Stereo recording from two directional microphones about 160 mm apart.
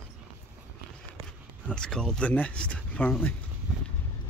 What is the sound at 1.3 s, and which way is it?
Speech, 5° left (ahead or behind).